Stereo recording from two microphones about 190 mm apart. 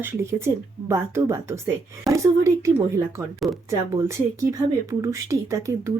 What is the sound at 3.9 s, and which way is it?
Speech, 15° right (ahead or behind).